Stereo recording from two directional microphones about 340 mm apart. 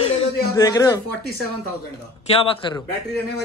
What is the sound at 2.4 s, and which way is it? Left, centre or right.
Speech, centre.